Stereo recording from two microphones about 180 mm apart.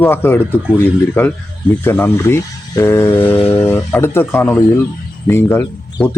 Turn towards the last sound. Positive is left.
turn(degrees=10)  # may be behind; listen again after turning